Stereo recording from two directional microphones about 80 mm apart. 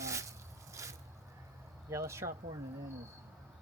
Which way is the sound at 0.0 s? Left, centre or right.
Right.